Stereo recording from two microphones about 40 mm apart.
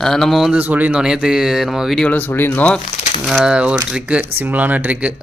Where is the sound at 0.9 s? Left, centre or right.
Centre.